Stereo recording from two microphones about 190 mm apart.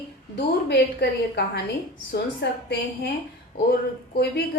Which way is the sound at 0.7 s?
60° left (ahead or behind).